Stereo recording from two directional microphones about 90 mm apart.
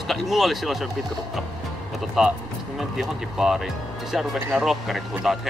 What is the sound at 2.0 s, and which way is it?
Speech, 5° right (ahead or behind).